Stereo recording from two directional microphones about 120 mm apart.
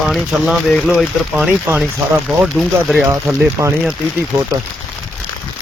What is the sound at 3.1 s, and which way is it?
Speech, 25° right (ahead or behind).